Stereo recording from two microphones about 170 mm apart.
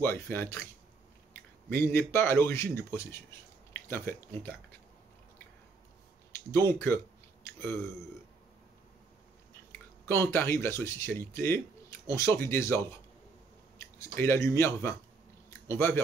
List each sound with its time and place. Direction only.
0.0 s speech: 15° left (ahead or behind)
1.7 s speech: 15° left (ahead or behind)
6.5 s speech: 15° left (ahead or behind)
10.0 s speech: 15° left (ahead or behind)